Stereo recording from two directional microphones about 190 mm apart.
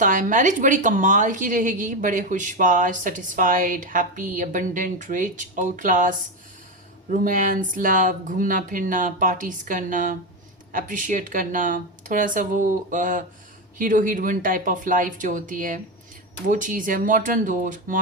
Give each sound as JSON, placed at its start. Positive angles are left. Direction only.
{"t": 0.0, "sound": "a woman's voice", "side_deg": -45}